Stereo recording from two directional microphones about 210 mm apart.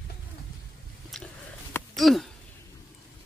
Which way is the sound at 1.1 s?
Centre (ahead or behind).